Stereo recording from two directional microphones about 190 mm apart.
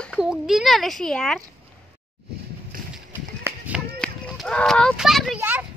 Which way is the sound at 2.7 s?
45° right (ahead or behind).